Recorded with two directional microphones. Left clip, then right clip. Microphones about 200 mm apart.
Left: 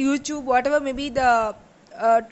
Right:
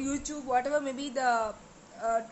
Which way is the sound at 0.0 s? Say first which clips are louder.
Left 11 dB; 35° left (ahead or behind).